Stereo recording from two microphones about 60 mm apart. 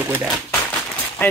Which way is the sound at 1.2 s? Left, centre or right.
Left.